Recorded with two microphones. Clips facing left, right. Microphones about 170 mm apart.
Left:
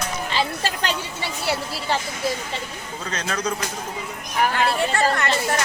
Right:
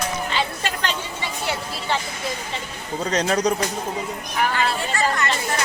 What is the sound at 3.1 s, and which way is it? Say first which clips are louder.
Speech: right 6 dB; 35° right (ahead or behind).